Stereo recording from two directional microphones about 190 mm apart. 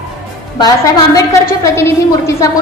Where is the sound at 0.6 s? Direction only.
20° left (ahead or behind).